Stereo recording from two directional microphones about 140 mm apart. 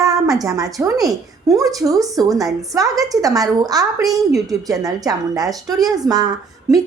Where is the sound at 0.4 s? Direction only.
25° right (ahead or behind).